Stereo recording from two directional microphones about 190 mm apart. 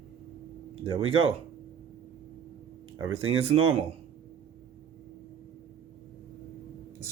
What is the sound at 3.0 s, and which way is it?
Speech, 30° right (ahead or behind).